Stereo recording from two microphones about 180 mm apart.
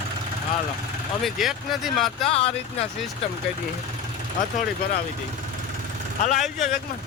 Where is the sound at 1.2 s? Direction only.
Centre (ahead or behind).